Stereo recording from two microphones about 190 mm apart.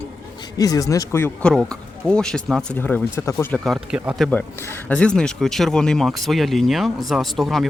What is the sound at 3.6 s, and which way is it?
Speech, centre (ahead or behind).